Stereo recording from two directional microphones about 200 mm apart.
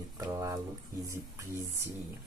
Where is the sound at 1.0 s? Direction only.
15° right (ahead or behind).